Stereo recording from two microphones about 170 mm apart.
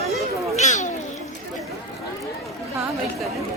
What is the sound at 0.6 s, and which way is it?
Cat, 45° left (ahead or behind).